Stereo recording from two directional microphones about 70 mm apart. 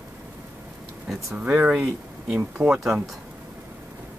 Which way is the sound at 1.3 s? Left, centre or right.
Right.